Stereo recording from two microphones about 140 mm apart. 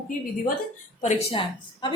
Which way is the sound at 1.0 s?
45° left (ahead or behind).